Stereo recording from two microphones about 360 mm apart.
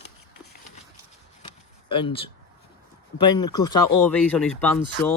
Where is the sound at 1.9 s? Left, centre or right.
Centre.